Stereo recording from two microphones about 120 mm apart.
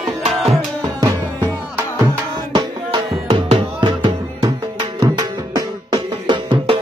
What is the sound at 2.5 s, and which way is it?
Music, 35° right (ahead or behind).